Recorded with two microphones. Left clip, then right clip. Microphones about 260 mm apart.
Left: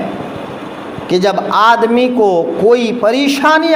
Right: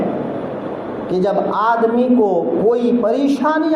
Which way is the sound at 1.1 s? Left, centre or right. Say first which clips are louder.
Left 5 dB; left.